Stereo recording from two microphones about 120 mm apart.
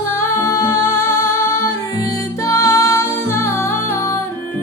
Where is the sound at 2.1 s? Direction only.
25° left (ahead or behind).